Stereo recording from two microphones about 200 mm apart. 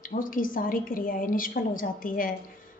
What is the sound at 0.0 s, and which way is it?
A woman's voice, 45° left (ahead or behind).